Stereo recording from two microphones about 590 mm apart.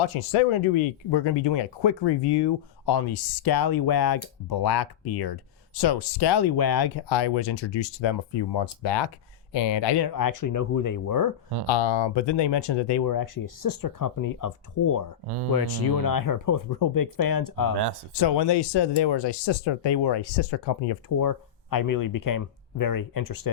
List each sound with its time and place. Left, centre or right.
0.0 s speech: left
11.7 s speech: left